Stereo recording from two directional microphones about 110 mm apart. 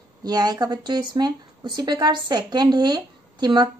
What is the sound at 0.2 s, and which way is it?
Speech, 35° right (ahead or behind).